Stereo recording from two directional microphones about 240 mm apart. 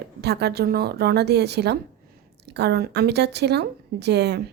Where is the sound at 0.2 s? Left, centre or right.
Right.